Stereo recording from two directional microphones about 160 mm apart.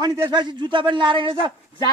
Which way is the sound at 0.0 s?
25° right (ahead or behind).